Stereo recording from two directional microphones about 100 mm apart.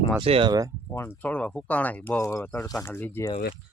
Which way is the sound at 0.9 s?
20° left (ahead or behind).